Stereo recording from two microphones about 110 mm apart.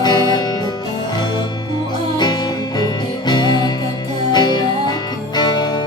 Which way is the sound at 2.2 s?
40° left (ahead or behind).